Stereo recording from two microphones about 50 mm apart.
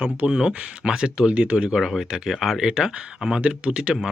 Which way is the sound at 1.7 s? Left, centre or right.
Centre.